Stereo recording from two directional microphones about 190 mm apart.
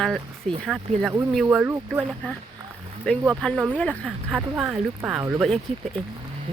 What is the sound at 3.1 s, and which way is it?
Speech, 5° left (ahead or behind).